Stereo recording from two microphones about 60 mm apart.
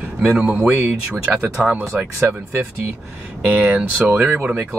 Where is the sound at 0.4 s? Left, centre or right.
Right.